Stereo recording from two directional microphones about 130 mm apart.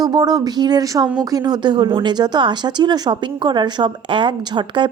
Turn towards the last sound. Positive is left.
turn(degrees=-40)  # may be behind; listen again after turning